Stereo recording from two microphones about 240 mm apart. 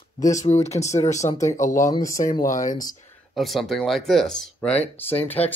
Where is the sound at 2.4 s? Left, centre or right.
Left.